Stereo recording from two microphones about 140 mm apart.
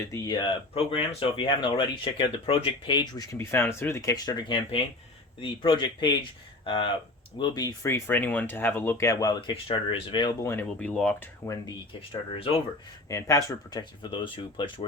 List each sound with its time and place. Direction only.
0.0 s speech: 20° left (ahead or behind)
0.3 s speech: 40° left (ahead or behind)
3.3 s speech: 15° left (ahead or behind)
7.9 s speech: 15° left (ahead or behind); by 10.3 s 35° left (ahead or behind)
10.4 s speech: 15° left (ahead or behind)
13.1 s speech: 20° left (ahead or behind)